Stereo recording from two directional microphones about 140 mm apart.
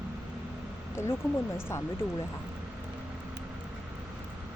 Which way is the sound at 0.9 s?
20° left (ahead or behind).